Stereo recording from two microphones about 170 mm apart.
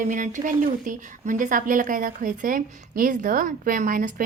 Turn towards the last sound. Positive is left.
turn(degrees=-50)  # may be behind; listen again after turning